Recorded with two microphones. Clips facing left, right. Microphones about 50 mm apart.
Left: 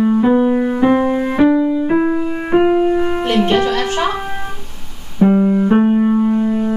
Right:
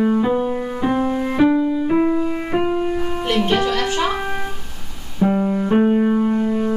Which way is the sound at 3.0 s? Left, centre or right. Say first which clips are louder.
Left 5 dB; left.